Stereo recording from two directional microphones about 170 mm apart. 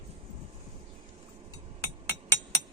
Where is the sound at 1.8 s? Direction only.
15° left (ahead or behind).